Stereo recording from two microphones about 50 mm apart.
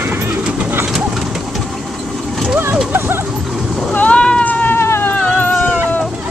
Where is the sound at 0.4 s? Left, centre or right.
Centre.